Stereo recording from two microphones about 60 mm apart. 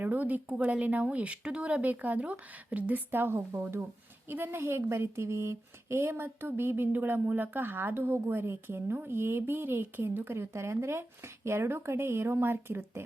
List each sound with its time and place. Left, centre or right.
0.0 s speech: right
10.5 s speech: right